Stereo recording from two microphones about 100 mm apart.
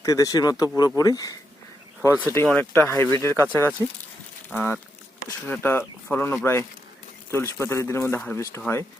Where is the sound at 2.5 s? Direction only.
20° left (ahead or behind).